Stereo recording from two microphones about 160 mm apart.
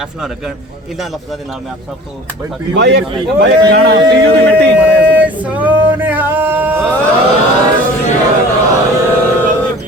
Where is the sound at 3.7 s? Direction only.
90° right.